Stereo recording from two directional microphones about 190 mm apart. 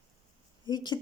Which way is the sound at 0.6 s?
25° left (ahead or behind).